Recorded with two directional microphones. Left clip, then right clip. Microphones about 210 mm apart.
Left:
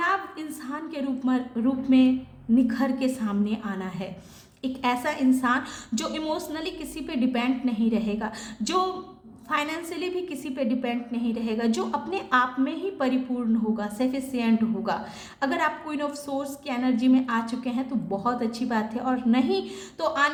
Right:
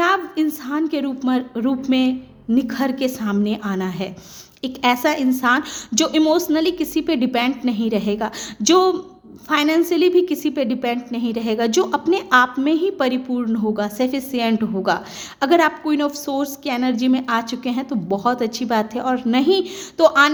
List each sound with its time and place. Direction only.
0.0 s a woman's voice: 45° right (ahead or behind)